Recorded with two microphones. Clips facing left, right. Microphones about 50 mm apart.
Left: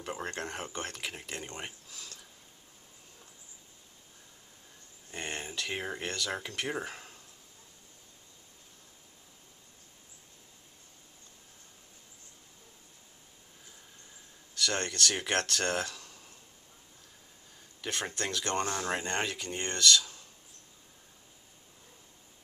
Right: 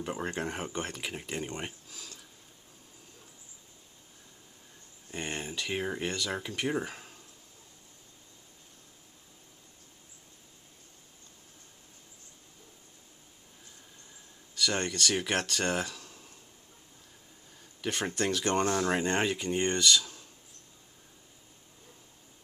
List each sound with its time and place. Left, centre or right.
0.0 s speech: centre
5.1 s speech: centre
14.6 s speech: centre
17.8 s speech: centre